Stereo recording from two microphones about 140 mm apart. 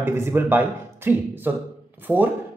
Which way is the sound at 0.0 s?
15° right (ahead or behind).